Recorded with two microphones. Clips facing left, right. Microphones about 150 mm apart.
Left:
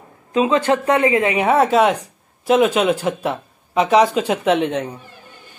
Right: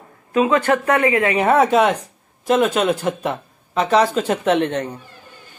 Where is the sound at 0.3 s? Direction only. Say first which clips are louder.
Even; 25° left (ahead or behind).